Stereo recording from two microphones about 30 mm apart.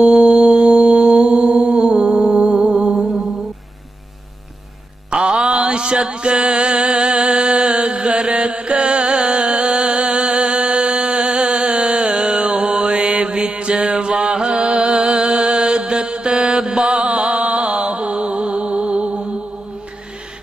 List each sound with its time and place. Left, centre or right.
0.2 s music: right
0.7 s mantra: right
2.7 s music: centre
3.1 s mantra: centre
5.1 s music: right
5.7 s a sound: right
6.5 s a sound: right
8.1 s chant: right
10.0 s music: right
10.8 s a sound: right
11.7 s music: right
12.5 s mantra: right
18.0 s music: right
19.0 s music: centre